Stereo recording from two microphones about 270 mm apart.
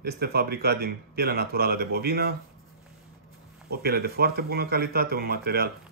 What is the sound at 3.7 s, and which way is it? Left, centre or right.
Speech, right.